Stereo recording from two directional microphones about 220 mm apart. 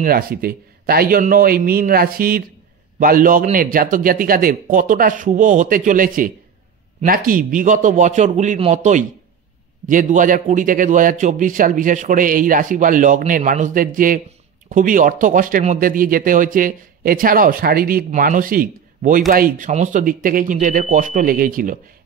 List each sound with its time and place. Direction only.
0.0 s speech: 40° right (ahead or behind)